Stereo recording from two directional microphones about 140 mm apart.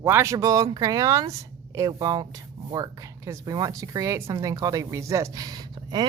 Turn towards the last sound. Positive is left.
turn(degrees=-30)  # may be behind; listen again after turning